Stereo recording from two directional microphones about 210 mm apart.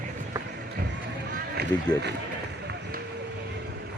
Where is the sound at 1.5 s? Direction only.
55° right (ahead or behind).